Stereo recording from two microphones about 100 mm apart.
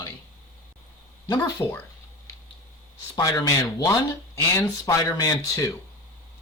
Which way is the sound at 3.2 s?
40° left (ahead or behind).